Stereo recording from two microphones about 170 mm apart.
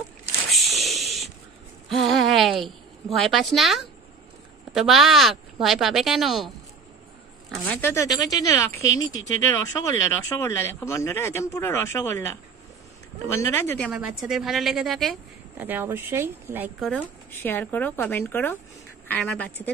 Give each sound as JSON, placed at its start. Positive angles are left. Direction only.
{"t": 0.5, "sound": "a sound", "side_deg": 0}
{"t": 2.6, "sound": "a woman's voice", "side_deg": 0}
{"t": 7.8, "sound": "speech", "side_deg": 15}
{"t": 13.3, "sound": "speech", "side_deg": 15}
{"t": 13.8, "sound": "speech", "side_deg": -5}
{"t": 15.5, "sound": "speech", "side_deg": -10}
{"t": 16.8, "sound": "speech", "side_deg": 10}